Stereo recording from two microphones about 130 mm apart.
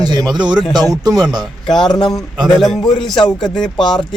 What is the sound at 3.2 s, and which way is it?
Speech, 35° left (ahead or behind).